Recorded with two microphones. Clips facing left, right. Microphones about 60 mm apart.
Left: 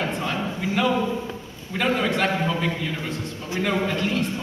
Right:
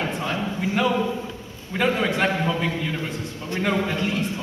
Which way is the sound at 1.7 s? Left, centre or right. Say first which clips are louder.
Right 1 dB; centre.